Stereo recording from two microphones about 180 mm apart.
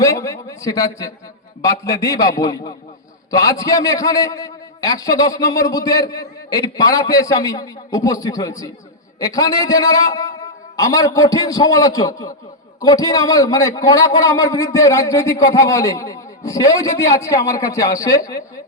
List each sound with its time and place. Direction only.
0.0 s a man's voice: 15° left (ahead or behind)